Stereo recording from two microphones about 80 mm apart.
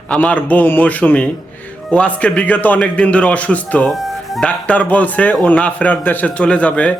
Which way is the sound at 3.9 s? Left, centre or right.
Centre.